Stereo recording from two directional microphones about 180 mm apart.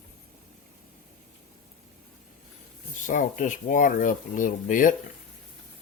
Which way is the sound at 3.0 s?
45° left (ahead or behind).